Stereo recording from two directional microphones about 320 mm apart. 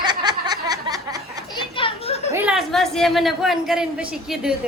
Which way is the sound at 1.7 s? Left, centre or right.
Centre.